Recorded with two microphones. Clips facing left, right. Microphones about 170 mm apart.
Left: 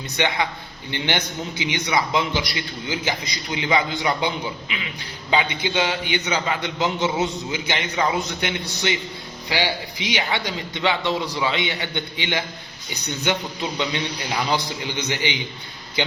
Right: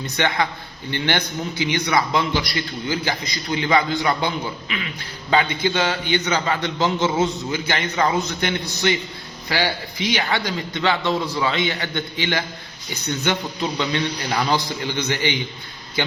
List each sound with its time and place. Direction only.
0.2 s a man's voice: 20° left (ahead or behind)